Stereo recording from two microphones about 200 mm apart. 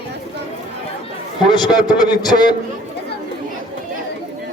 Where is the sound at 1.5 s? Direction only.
20° left (ahead or behind).